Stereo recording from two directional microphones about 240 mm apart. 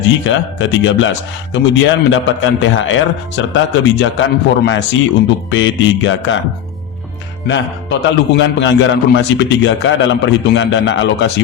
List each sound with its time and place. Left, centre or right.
0.3 s a man's voice: left
7.4 s a man's voice: left